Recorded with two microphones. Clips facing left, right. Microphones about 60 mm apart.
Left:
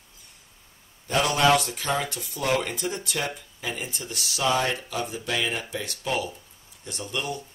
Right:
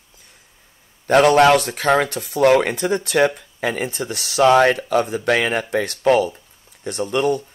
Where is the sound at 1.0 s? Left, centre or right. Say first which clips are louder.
Right 9 dB; right.